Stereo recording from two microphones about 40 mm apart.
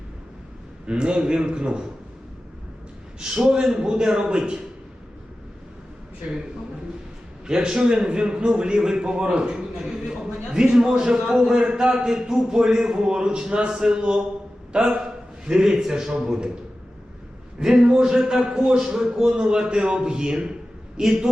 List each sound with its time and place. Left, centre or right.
0.9 s a man's voice: right
3.2 s a man's voice: centre
7.4 s a man's voice: centre
17.6 s a man's voice: centre
21.0 s a man's voice: centre